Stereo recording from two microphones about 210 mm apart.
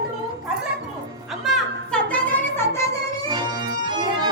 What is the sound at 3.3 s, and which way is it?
Organ, 20° right (ahead or behind).